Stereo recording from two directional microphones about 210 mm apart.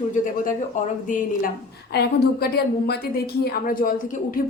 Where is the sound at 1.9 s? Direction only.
50° left (ahead or behind).